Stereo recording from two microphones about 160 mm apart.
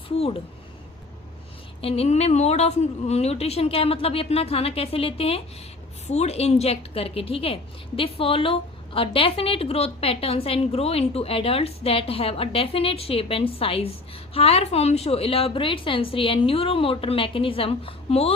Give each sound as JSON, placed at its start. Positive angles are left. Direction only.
{"t": 1.8, "sound": "a woman's voice", "side_deg": 40}